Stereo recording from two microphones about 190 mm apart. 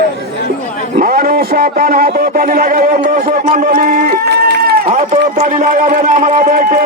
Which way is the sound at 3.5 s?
50° right (ahead or behind).